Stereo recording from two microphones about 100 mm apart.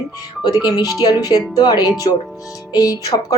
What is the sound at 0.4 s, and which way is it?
A woman's voice, 40° left (ahead or behind).